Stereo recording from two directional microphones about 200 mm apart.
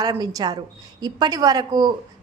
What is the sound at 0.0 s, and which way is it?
A woman's voice, 20° right (ahead or behind).